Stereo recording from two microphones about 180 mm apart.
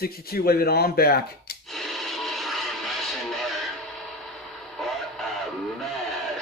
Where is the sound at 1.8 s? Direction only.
Centre (ahead or behind).